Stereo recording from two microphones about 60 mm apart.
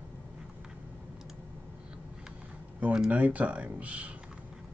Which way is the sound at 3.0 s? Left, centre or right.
Right.